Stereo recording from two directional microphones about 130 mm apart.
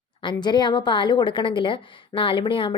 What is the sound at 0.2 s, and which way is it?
A woman's voice, 35° left (ahead or behind).